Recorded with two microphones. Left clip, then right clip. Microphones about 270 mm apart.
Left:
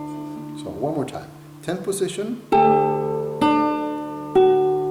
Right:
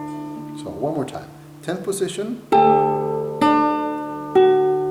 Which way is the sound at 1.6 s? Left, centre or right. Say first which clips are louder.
Right 1 dB; centre.